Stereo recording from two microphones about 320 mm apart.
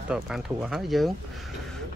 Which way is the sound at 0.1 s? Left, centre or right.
Centre.